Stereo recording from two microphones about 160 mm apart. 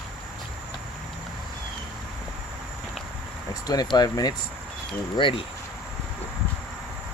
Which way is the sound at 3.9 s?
25° left (ahead or behind).